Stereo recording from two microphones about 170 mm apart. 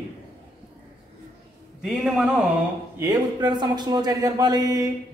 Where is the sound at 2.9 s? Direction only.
20° right (ahead or behind).